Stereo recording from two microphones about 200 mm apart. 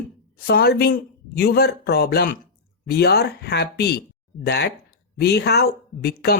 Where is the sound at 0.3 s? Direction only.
50° left (ahead or behind).